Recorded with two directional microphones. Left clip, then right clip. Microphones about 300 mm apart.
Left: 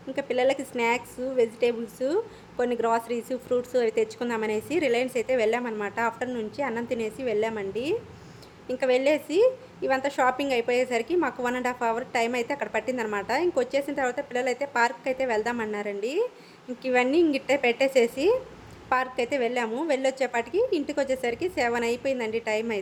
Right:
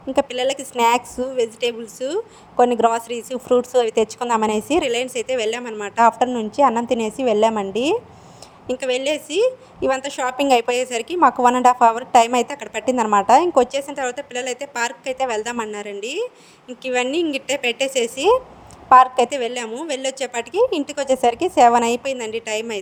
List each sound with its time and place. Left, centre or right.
0.2 s speech: right